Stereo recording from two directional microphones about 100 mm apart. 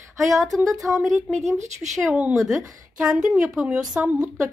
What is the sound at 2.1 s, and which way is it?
Speech, 15° right (ahead or behind).